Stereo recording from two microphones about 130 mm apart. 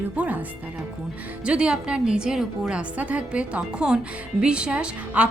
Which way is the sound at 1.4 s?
10° right (ahead or behind).